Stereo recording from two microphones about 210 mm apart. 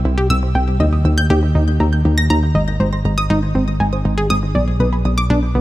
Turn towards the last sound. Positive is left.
turn(degrees=0)  # may be behind; listen again after turning